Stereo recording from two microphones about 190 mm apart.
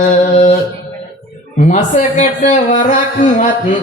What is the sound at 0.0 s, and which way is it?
Music, 35° left (ahead or behind).